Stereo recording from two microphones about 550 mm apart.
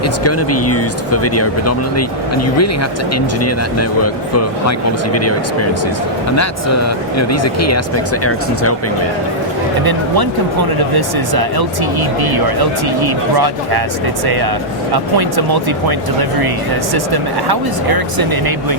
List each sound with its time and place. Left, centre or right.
0.3 s speech: left
10.9 s speech: right
14.9 s speech: right